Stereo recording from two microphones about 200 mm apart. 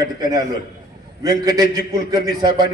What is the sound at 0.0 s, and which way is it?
A man's voice, 20° right (ahead or behind).